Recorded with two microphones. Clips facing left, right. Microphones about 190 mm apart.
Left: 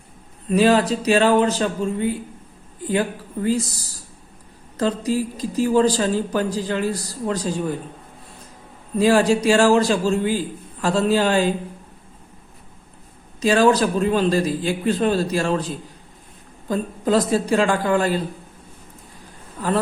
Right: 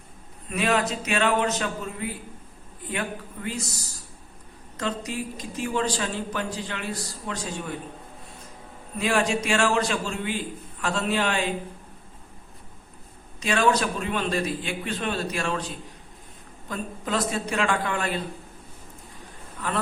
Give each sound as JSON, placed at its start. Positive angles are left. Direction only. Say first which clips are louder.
{"t": 0.5, "sound": "speech", "louder": "left 8 dB", "side_deg": 35}
{"t": 9.0, "sound": "speech", "louder": "left 8 dB", "side_deg": 35}
{"t": 13.4, "sound": "speech", "louder": "left 7 dB", "side_deg": 35}